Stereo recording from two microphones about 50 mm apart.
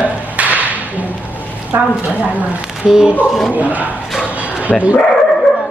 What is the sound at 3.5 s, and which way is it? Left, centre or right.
Speech, right.